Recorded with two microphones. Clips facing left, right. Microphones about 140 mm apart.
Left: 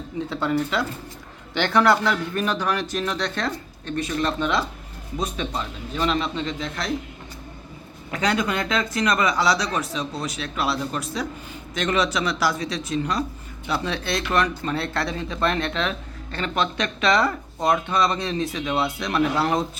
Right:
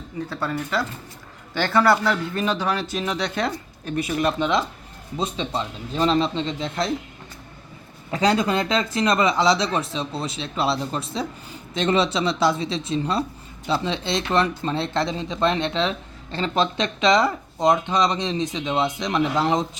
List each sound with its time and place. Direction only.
1.6 s a man's voice: 5° right (ahead or behind)
4.4 s speech: 20° right (ahead or behind)
8.1 s speech: 30° right (ahead or behind)